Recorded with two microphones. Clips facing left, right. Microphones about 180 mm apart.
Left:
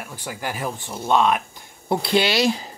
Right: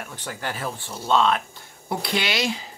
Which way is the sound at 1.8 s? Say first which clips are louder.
Left 6 dB; 30° left (ahead or behind).